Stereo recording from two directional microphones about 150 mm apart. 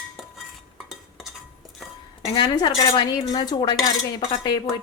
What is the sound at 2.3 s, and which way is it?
Dishes, 30° left (ahead or behind).